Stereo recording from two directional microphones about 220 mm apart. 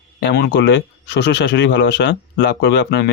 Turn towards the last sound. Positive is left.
turn(degrees=50)  # may be behind; listen again after turning